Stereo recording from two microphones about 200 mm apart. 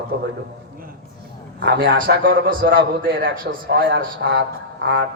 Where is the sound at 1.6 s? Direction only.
50° right (ahead or behind).